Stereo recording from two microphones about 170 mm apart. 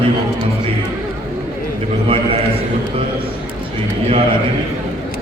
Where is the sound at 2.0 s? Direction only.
35° right (ahead or behind).